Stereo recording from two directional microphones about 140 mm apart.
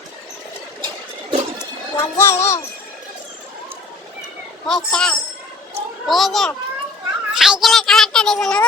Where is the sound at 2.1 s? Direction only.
20° left (ahead or behind).